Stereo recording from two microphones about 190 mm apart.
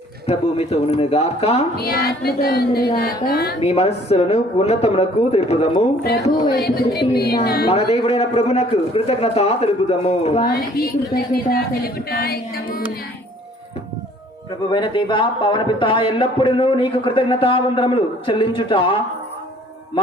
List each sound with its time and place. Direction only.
0.3 s speech: 30° left (ahead or behind)
1.7 s a woman's voice: 55° left (ahead or behind)
3.6 s speech: 30° left (ahead or behind)
6.5 s a woman's voice: 55° left (ahead or behind)
7.7 s speech: 30° left (ahead or behind)
10.4 s a woman's voice: 55° left (ahead or behind)
14.7 s a man's voice: 25° left (ahead or behind)